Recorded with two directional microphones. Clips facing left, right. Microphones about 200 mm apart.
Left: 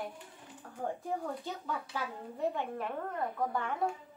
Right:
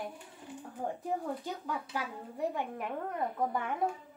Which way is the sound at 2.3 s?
15° right (ahead or behind).